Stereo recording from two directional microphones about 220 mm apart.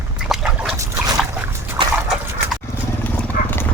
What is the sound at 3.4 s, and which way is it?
Horse, 40° left (ahead or behind).